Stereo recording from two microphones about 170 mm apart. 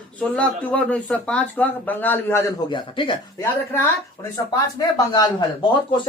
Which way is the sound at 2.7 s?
30° left (ahead or behind).